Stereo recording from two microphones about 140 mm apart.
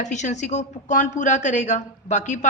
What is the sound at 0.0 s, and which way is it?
A woman's voice, 60° left (ahead or behind).